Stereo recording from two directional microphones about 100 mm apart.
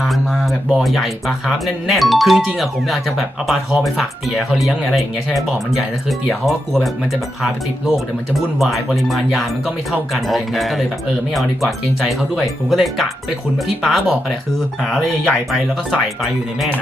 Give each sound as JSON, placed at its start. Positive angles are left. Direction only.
{"t": 0.7, "sound": "speech", "side_deg": 0}